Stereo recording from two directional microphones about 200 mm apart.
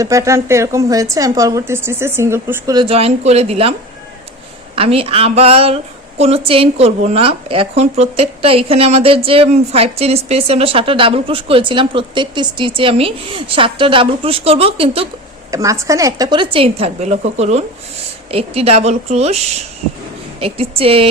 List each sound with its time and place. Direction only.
0.0 s a woman's voice: 15° right (ahead or behind)
15.5 s speech: 15° right (ahead or behind); by 19.4 s 30° right (ahead or behind)
20.4 s speech: 30° right (ahead or behind)